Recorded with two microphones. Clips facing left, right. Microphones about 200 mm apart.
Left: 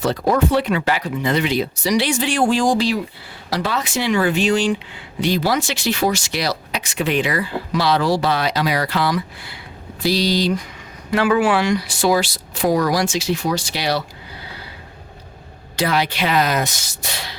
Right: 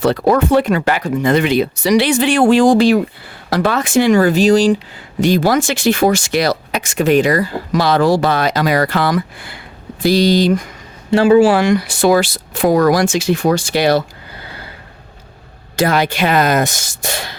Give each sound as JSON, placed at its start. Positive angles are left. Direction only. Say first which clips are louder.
{"t": 0.0, "sound": "speech", "louder": "right 5 dB", "side_deg": -65}
{"t": 5.2, "sound": "speech", "louder": "right 6 dB", "side_deg": -50}
{"t": 11.1, "sound": "speech", "louder": "right 7 dB", "side_deg": -30}
{"t": 11.5, "sound": "speech", "louder": "right 5 dB", "side_deg": -50}
{"t": 15.7, "sound": "speech", "louder": "right 5 dB", "side_deg": -45}